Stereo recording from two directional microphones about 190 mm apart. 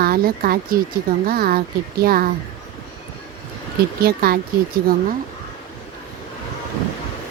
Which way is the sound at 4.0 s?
55° right (ahead or behind).